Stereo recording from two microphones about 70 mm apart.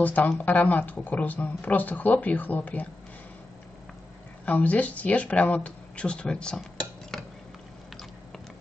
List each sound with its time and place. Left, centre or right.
0.0 s speech: left
4.5 s speech: left